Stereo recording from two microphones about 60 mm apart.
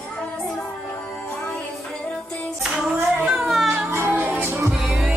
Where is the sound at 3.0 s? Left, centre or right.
Centre.